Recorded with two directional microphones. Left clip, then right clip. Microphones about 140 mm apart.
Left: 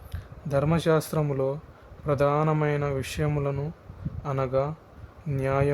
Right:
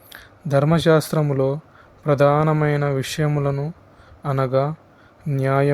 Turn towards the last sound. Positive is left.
turn(degrees=-35)  # may be behind; listen again after turning